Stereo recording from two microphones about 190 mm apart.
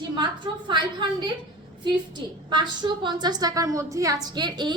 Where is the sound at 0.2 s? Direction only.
25° right (ahead or behind).